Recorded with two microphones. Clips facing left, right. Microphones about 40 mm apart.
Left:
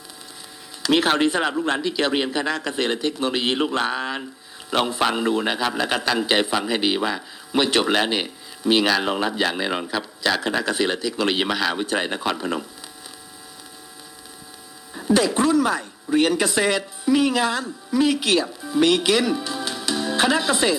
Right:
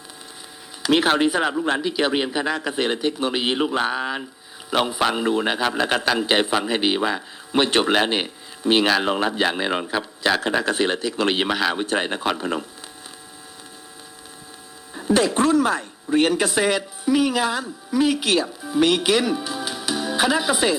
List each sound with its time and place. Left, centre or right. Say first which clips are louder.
0.9 s a man's voice: right 1 dB; centre
8.9 s a man's voice: right 1 dB; centre
10.2 s a man's voice: right 1 dB; centre
15.0 s a sound: even; centre
15.5 s a man's voice: right 1 dB; right